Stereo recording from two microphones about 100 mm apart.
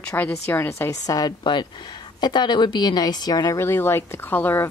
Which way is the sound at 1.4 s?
50° left (ahead or behind).